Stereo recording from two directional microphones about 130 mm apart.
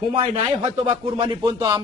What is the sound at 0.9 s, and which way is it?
Speech, 45° right (ahead or behind).